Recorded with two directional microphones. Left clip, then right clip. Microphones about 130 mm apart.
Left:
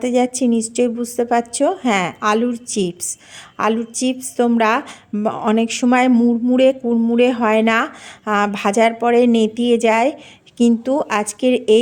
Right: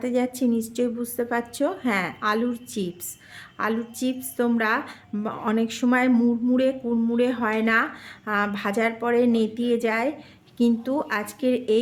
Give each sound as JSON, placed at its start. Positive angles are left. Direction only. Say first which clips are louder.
{"t": 0.0, "sound": "a woman's voice", "louder": "left 7 dB", "side_deg": 40}
{"t": 6.6, "sound": "speech", "louder": "left 9 dB", "side_deg": 45}